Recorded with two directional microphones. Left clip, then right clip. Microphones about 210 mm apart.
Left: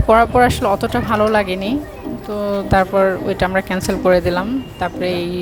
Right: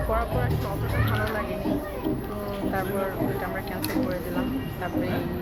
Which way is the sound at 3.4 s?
55° left (ahead or behind).